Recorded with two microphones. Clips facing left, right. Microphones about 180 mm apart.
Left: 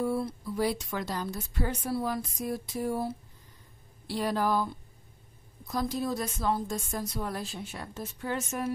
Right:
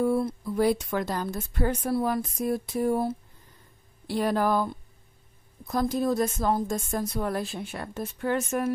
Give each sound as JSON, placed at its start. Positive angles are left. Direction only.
{"t": 0.0, "sound": "a woman's voice", "side_deg": -50}
{"t": 4.1, "sound": "a woman's voice", "side_deg": -55}
{"t": 5.7, "sound": "a woman's voice", "side_deg": -50}